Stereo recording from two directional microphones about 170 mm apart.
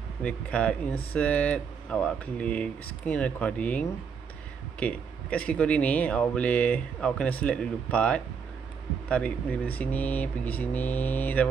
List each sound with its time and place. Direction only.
0.2 s speech: 5° left (ahead or behind)